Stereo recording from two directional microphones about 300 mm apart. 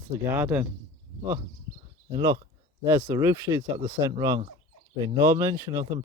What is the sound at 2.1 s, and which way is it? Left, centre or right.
Speech, centre.